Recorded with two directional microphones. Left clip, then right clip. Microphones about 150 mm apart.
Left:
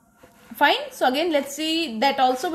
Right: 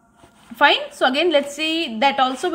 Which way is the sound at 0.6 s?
20° right (ahead or behind).